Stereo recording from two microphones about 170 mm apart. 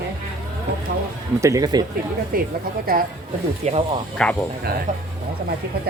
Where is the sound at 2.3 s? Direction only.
60° right (ahead or behind).